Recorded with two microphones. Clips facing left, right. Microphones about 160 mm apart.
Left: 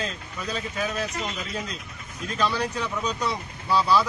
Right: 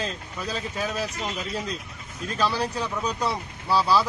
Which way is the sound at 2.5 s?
30° right (ahead or behind).